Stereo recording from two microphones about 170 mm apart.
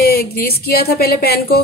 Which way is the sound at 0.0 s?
60° left (ahead or behind).